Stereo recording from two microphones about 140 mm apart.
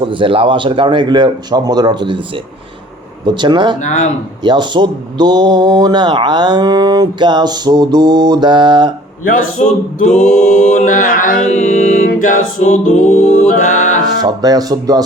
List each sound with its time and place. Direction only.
0.0 s speech: 35° right (ahead or behind)
3.8 s music: 60° left (ahead or behind)
4.4 s speech: 35° right (ahead or behind)
9.2 s speech: 75° left (ahead or behind)
10.2 s music: 55° left (ahead or behind); by 11.4 s 75° left (ahead or behind)
12.2 s music: 65° left (ahead or behind)
14.0 s speech: 30° right (ahead or behind)